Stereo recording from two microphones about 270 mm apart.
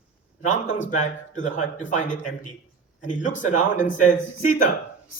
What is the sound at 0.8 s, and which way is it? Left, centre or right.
Speech, left.